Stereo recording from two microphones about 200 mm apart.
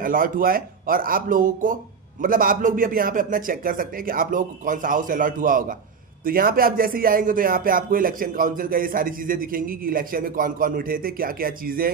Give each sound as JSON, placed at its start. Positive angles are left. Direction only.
{"t": 0.0, "sound": "speech", "side_deg": -45}